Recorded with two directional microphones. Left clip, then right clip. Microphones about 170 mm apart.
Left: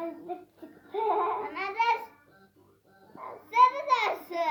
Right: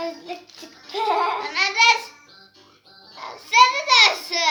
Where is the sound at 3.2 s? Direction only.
5° right (ahead or behind).